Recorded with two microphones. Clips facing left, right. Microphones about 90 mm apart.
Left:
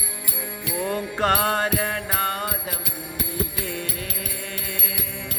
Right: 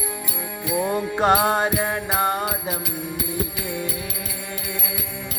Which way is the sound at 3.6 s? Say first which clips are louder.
Right 3 dB; 15° right (ahead or behind).